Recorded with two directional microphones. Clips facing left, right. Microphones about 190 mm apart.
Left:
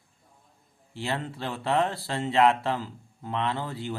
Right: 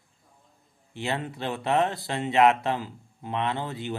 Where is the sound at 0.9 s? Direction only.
20° right (ahead or behind).